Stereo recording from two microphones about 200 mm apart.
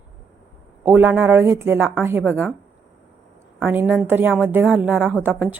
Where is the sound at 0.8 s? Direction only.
10° right (ahead or behind).